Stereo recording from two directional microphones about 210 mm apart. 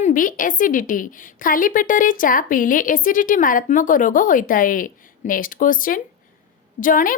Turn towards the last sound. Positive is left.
turn(degrees=40)  # may be behind; listen again after turning